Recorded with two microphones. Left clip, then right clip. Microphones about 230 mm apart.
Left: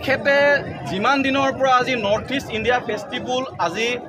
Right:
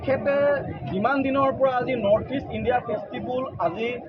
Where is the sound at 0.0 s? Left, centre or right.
Left.